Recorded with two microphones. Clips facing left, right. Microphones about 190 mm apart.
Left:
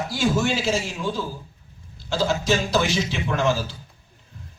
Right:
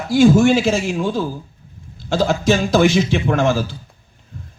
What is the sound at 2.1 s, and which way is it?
A man's voice, 50° right (ahead or behind).